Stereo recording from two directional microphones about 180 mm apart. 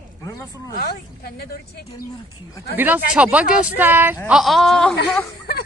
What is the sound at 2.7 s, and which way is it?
Speech, 10° right (ahead or behind).